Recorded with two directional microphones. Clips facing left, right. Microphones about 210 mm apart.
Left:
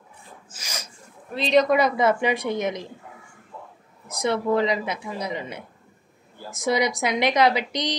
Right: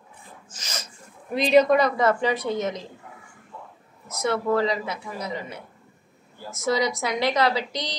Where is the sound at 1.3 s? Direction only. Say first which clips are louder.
Right 2 dB; 10° right (ahead or behind).